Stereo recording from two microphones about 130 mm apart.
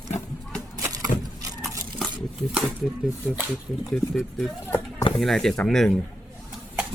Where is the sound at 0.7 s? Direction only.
30° right (ahead or behind).